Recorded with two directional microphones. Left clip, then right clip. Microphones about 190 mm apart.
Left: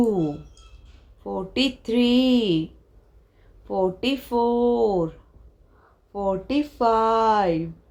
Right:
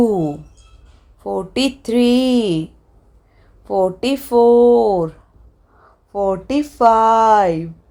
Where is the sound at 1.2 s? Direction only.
35° right (ahead or behind).